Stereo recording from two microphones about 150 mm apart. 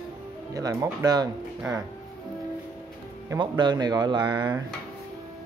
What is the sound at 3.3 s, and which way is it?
Speech, 30° right (ahead or behind).